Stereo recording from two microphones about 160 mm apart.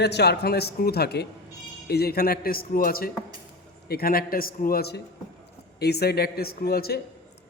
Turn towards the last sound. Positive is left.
turn(degrees=75)  # may be behind; listen again after turning